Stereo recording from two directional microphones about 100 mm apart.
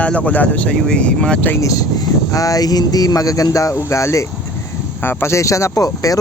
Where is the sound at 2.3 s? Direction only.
35° left (ahead or behind).